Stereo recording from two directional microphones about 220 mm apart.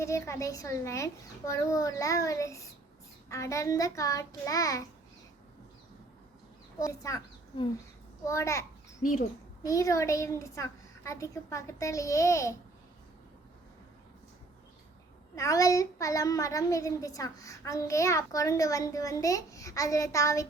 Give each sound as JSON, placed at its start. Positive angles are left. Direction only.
{"t": 0.0, "sound": "a child's voice", "side_deg": 15}
{"t": 6.7, "sound": "a child's voice", "side_deg": 15}
{"t": 9.0, "sound": "speech", "side_deg": 35}
{"t": 9.6, "sound": "a child's voice", "side_deg": 15}
{"t": 15.4, "sound": "a child's voice", "side_deg": 15}